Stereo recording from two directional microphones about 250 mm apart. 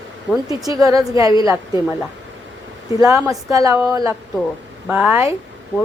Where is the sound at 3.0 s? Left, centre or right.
Centre.